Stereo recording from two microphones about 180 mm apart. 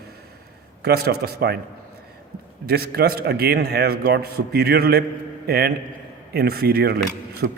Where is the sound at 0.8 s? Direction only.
60° right (ahead or behind).